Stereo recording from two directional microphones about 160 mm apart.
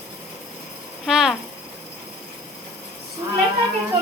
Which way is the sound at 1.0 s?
Centre (ahead or behind).